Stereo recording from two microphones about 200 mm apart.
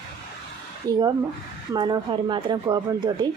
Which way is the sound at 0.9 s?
20° right (ahead or behind).